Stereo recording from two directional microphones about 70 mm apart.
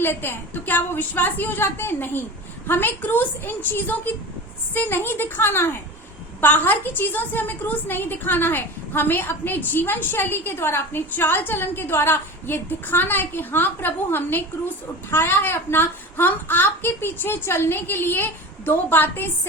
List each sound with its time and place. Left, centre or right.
0.0 s a woman's voice: left